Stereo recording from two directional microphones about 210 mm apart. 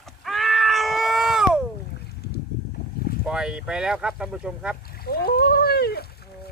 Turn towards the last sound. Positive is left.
turn(degrees=50)  # may be behind; listen again after turning